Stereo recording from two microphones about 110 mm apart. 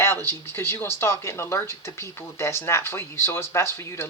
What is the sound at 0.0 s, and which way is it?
Speech, 20° left (ahead or behind).